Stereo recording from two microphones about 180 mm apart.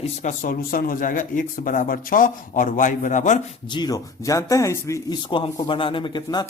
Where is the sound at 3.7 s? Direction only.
25° left (ahead or behind).